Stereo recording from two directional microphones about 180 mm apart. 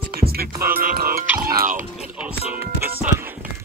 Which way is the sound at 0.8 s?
55° right (ahead or behind).